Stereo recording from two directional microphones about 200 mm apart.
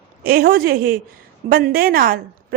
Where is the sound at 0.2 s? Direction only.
50° right (ahead or behind).